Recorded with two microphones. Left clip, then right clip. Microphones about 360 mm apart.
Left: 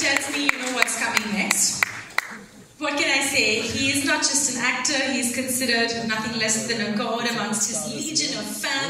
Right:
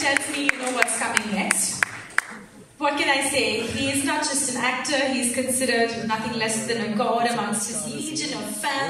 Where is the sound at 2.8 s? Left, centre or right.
Centre.